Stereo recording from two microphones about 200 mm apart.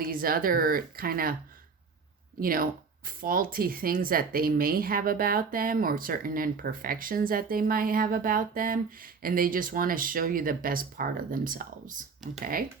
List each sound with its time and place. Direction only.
0.0 s speech: 45° right (ahead or behind)
2.4 s speech: 45° right (ahead or behind)